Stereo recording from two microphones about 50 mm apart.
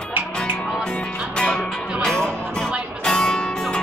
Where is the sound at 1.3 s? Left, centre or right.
Centre.